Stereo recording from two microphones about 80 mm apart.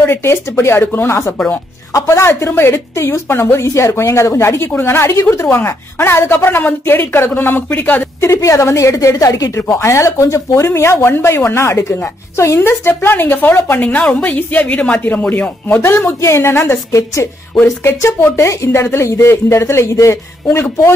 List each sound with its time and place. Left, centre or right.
0.0 s speech: left
8.3 s a woman's voice: left